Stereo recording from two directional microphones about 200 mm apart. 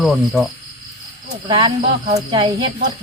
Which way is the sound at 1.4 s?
20° right (ahead or behind).